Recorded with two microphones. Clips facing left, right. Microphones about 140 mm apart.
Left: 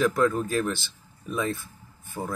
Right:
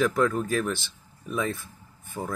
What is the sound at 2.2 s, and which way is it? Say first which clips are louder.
Speech: even; 5° left (ahead or behind).